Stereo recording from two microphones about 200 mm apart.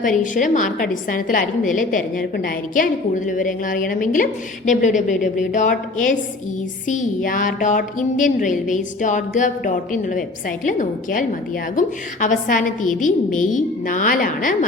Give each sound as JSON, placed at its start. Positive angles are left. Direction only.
{"t": 0.0, "sound": "a woman's voice", "side_deg": 40}